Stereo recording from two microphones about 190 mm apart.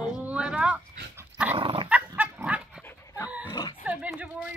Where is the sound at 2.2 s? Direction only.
5° right (ahead or behind).